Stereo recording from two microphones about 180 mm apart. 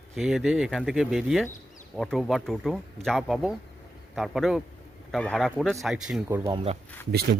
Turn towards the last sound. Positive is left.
turn(degrees=-60)  # may be behind; listen again after turning